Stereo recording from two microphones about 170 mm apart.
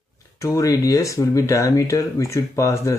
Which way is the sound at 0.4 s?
20° left (ahead or behind).